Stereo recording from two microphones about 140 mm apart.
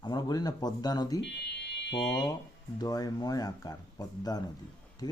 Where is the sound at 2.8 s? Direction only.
25° left (ahead or behind).